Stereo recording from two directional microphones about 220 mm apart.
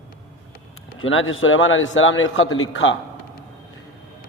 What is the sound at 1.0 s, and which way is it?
A man's voice, 65° left (ahead or behind).